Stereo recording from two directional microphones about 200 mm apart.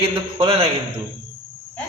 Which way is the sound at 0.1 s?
25° right (ahead or behind).